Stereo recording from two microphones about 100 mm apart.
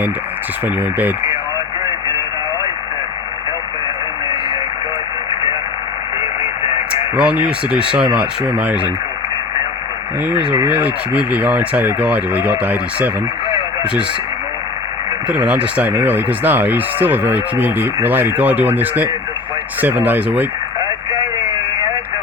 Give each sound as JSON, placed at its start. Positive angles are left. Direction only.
{"t": 0.8, "sound": "speech", "side_deg": -20}
{"t": 7.2, "sound": "speech", "side_deg": -10}
{"t": 10.2, "sound": "speech", "side_deg": -15}
{"t": 15.3, "sound": "speech", "side_deg": -10}